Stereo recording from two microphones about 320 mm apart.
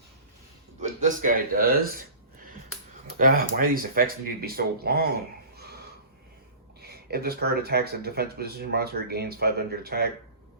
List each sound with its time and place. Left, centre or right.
0.8 s speech: right
3.2 s speech: right
5.5 s a sound: right
6.8 s speech: right